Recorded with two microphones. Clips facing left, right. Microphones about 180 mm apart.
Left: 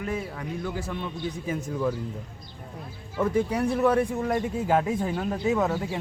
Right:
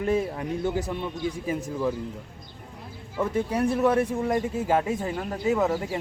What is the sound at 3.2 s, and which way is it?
Speech, 10° right (ahead or behind).